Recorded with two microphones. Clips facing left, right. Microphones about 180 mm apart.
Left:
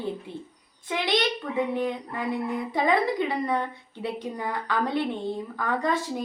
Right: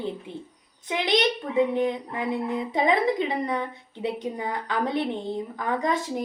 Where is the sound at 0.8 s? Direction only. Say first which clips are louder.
Right 2 dB; 20° right (ahead or behind).